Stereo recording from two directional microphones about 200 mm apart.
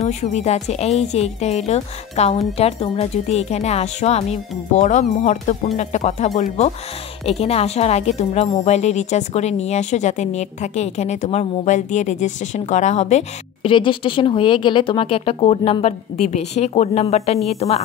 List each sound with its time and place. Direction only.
0.0 s speech: 35° left (ahead or behind)